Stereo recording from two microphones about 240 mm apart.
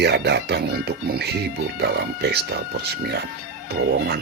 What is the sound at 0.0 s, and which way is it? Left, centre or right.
Speech, right.